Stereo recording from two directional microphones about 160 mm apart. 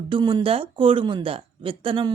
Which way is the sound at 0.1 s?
30° right (ahead or behind).